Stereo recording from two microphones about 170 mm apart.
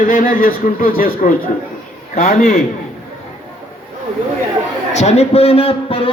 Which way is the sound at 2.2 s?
50° left (ahead or behind).